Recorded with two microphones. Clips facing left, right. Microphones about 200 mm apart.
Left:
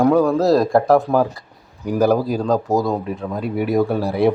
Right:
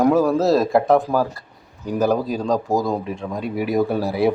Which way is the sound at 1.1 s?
20° left (ahead or behind).